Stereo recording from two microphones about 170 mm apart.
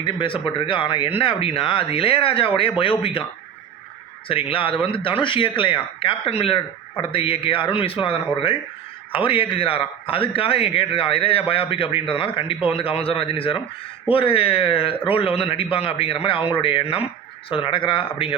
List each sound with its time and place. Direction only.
0.0 s speech: 30° left (ahead or behind)
4.3 s speech: 30° left (ahead or behind)